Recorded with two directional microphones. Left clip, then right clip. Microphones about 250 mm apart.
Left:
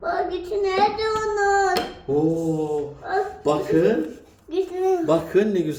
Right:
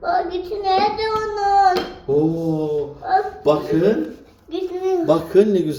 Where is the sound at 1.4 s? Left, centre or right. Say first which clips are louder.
Right 4 dB; left.